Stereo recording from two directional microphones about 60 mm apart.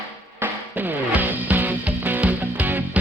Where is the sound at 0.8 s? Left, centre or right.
Right.